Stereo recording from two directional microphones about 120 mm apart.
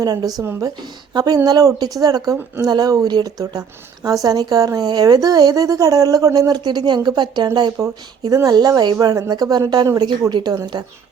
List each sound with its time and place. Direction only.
0.0 s speech: 30° right (ahead or behind)